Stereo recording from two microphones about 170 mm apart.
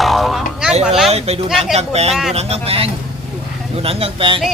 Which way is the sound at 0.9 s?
Centre (ahead or behind).